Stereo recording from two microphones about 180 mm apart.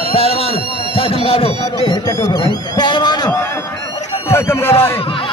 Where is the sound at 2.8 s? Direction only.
25° left (ahead or behind).